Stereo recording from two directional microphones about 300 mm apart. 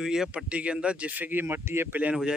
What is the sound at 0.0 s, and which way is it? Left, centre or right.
Speech, centre.